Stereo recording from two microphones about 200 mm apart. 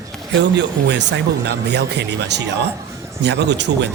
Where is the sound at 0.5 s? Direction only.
60° right (ahead or behind).